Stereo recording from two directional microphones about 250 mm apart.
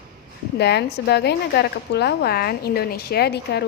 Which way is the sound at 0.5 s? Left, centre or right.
Left.